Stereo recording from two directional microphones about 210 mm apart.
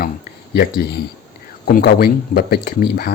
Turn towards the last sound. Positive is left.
turn(degrees=45)  # may be behind; listen again after turning